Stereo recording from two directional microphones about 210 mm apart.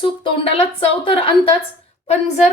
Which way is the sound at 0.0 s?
25° left (ahead or behind).